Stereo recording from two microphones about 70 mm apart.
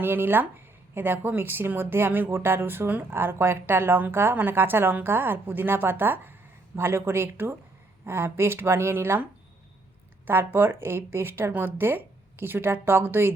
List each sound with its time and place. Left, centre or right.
0.0 s speech: right
10.2 s speech: right